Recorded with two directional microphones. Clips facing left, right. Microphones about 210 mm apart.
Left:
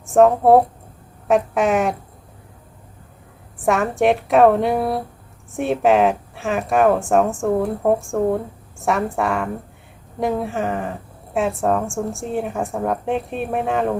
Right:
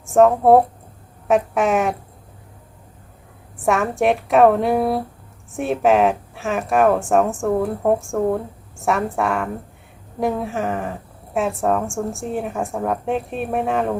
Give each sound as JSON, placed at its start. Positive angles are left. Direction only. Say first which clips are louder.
{"t": 0.0, "sound": "speech", "louder": "even", "side_deg": 0}
{"t": 3.6, "sound": "speech", "louder": "left 1 dB", "side_deg": 0}